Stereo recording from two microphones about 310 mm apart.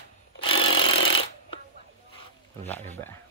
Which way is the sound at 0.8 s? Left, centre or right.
Left.